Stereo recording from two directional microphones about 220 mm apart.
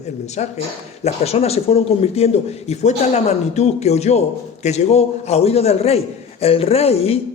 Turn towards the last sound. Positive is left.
turn(degrees=25)  # may be behind; listen again after turning